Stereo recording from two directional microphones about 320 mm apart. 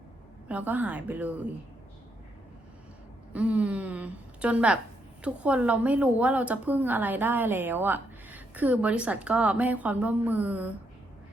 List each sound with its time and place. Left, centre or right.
0.4 s a woman's voice: centre
3.3 s a woman's voice: centre